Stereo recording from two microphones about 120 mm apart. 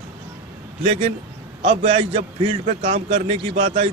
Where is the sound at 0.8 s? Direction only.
60° right (ahead or behind).